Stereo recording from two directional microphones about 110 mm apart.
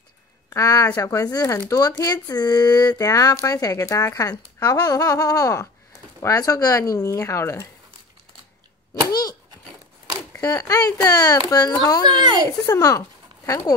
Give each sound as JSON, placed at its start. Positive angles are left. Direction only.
{"t": 0.5, "sound": "speech", "side_deg": 30}
{"t": 9.1, "sound": "a sound", "side_deg": 35}
{"t": 10.3, "sound": "speech", "side_deg": 35}
{"t": 12.0, "sound": "a child's voice", "side_deg": -45}
{"t": 12.4, "sound": "speech", "side_deg": 30}